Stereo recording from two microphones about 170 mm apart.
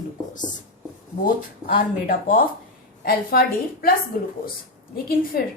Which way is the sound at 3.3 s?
60° left (ahead or behind).